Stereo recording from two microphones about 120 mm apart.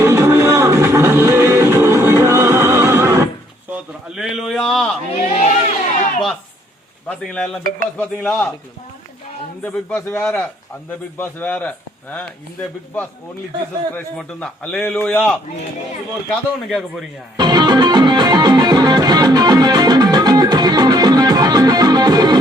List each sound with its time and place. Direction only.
0.0 s music: 20° right (ahead or behind)
3.8 s a sound: 5° right (ahead or behind)
5.3 s chatter: 80° left
7.1 s stir: 5° left (ahead or behind)
8.2 s a man's voice: 5° left (ahead or behind)
9.6 s a man's voice: 15° left (ahead or behind)
14.2 s a man's voice: 10° left (ahead or behind)
17.3 s music: 35° right (ahead or behind)